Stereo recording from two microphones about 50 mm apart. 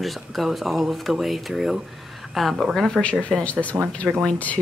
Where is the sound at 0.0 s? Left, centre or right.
Centre.